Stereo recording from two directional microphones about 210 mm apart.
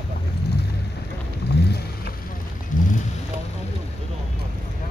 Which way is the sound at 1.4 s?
50° left (ahead or behind).